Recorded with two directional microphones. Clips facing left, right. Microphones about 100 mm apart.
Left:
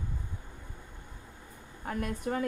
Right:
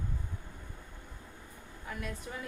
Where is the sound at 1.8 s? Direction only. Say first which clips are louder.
Left 8 dB; 55° left (ahead or behind).